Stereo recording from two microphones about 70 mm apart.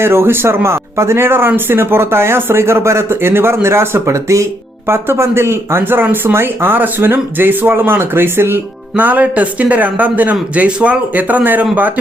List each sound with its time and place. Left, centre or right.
0.0 s speech: right